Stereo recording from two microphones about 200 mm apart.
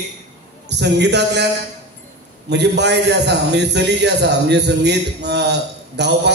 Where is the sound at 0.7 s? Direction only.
60° right (ahead or behind).